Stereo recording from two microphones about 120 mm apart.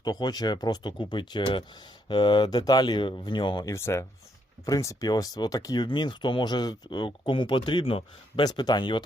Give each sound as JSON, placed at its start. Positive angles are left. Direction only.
{"t": 0.0, "sound": "speech", "side_deg": 35}
{"t": 3.7, "sound": "speech", "side_deg": 20}
{"t": 8.4, "sound": "speech", "side_deg": 35}